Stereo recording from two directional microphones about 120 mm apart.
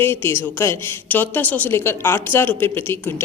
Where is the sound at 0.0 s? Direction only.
20° left (ahead or behind).